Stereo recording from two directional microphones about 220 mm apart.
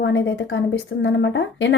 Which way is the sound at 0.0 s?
55° left (ahead or behind).